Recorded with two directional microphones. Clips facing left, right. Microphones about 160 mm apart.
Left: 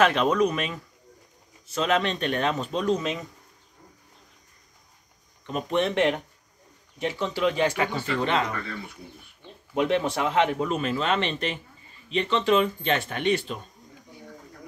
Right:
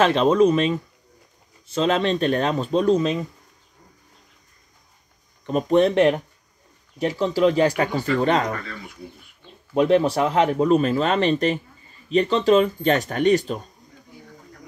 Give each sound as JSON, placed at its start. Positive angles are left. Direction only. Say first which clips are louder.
{"t": 0.0, "sound": "speech", "louder": "right 5 dB", "side_deg": -30}
{"t": 5.5, "sound": "speech", "louder": "right 8 dB", "side_deg": -40}
{"t": 9.8, "sound": "speech", "louder": "right 6 dB", "side_deg": -35}